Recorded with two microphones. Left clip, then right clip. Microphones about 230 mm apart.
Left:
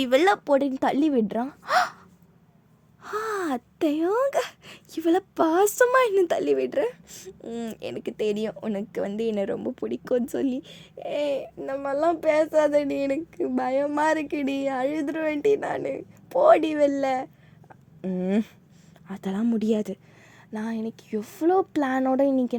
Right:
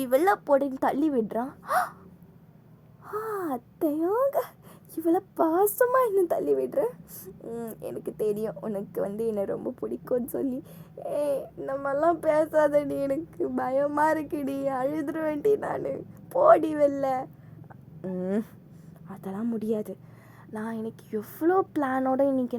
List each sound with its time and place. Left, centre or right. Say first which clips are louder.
0.0 s speech: left 3 dB; left
3.0 s speech: left 3 dB; left